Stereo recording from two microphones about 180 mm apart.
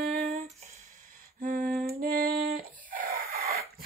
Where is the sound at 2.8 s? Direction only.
50° right (ahead or behind).